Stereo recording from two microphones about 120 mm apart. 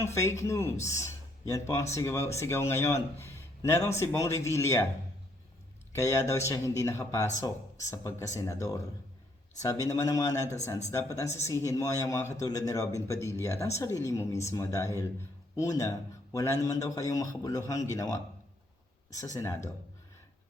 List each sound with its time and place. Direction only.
0.0 s speech: 25° left (ahead or behind)
5.9 s speech: 25° left (ahead or behind)
19.2 s speech: 30° left (ahead or behind)